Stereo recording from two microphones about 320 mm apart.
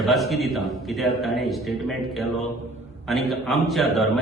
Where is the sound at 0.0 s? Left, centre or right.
Centre.